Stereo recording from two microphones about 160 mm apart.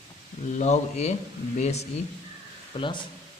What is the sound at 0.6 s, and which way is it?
A man's voice, 45° left (ahead or behind).